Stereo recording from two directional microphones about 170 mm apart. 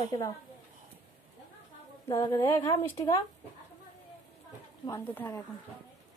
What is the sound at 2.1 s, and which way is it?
A woman's voice, 20° left (ahead or behind).